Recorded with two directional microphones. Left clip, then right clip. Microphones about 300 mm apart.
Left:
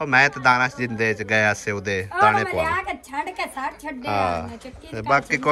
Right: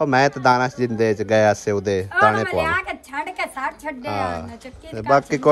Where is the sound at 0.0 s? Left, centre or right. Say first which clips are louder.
Right 1 dB; centre.